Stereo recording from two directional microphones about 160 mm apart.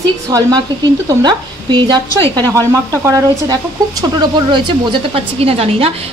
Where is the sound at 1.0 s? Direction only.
25° right (ahead or behind).